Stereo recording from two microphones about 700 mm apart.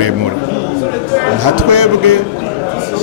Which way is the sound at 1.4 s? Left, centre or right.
Right.